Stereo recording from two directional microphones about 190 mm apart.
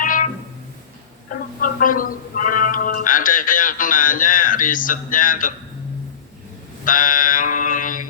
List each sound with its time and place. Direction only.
0.0 s music: 45° left (ahead or behind)
1.3 s speech: 45° left (ahead or behind)
6.8 s a sound: 45° left (ahead or behind)